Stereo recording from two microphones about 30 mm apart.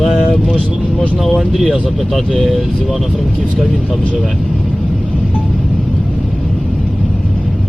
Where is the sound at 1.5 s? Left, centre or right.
Centre.